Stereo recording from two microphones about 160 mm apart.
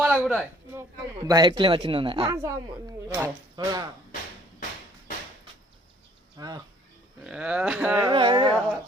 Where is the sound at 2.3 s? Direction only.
20° right (ahead or behind).